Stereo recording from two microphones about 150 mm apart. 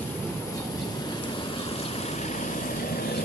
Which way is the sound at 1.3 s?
35° left (ahead or behind).